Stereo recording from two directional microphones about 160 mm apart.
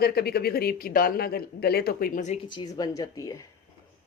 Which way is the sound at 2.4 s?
30° left (ahead or behind).